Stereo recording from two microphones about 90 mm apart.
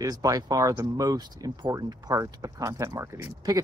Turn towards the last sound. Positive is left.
turn(degrees=-35)  # may be behind; listen again after turning